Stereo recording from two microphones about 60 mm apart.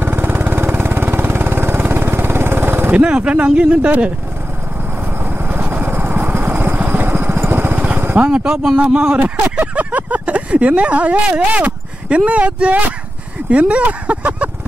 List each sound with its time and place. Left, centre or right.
0.0 s vehicle: right
2.9 s speech: centre
5.2 s vehicle: right
8.3 s speech: centre
9.2 s a sound: right
12.3 s speech: right